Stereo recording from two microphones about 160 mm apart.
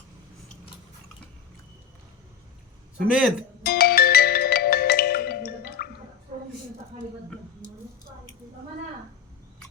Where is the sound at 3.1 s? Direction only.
5° right (ahead or behind).